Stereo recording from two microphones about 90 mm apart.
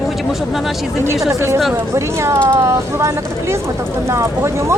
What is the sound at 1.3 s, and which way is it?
Speech, 35° right (ahead or behind).